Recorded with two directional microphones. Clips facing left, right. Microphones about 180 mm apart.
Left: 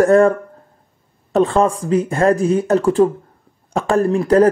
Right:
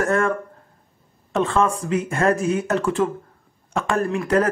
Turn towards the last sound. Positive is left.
turn(degrees=35)  # may be behind; listen again after turning